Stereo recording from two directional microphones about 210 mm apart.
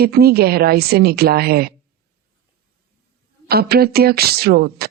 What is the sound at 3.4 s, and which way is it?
Speech, 50° right (ahead or behind).